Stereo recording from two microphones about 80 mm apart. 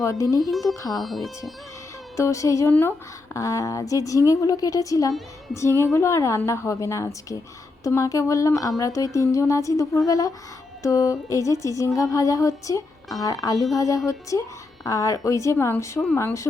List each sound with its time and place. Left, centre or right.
0.0 s a woman's voice: left
0.5 s speech: centre
0.8 s a woman's voice: left
1.0 s speech: centre
2.1 s a woman's voice: left